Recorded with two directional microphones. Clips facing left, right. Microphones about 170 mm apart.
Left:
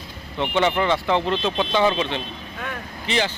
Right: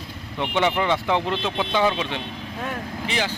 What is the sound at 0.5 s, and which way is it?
Speech, 15° right (ahead or behind).